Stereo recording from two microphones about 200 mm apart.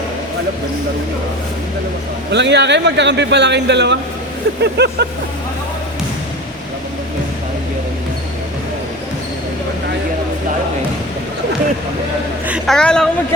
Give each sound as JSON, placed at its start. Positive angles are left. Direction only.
{"t": 2.3, "sound": "a man's voice", "side_deg": -60}
{"t": 12.5, "sound": "a woman's voice", "side_deg": 0}